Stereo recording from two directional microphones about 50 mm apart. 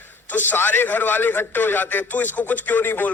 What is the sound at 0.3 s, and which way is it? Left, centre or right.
A man's voice, left.